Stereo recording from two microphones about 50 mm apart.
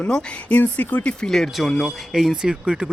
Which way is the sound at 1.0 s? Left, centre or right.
Left.